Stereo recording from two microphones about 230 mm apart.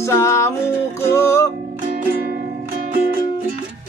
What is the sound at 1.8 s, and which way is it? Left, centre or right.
Music, right.